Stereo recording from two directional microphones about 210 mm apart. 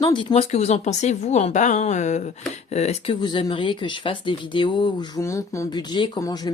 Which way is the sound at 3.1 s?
20° left (ahead or behind).